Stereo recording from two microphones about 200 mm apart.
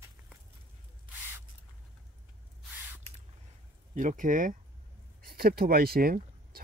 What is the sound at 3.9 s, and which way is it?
Speech, 40° right (ahead or behind).